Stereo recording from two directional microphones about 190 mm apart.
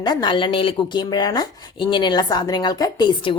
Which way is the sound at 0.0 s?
25° left (ahead or behind).